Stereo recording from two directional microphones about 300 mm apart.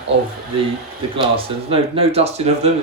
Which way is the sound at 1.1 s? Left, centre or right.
Centre.